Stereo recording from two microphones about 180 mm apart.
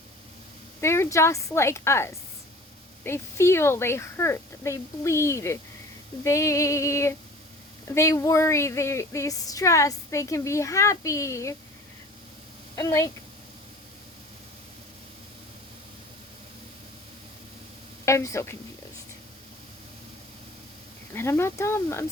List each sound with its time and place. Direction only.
0.8 s speech: 15° left (ahead or behind)
12.7 s a woman's voice: 20° left (ahead or behind)
18.0 s speech: 15° left (ahead or behind)
21.1 s speech: 15° left (ahead or behind)